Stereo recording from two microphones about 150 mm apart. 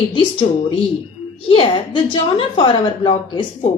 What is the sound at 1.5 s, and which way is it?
Speech, 35° left (ahead or behind).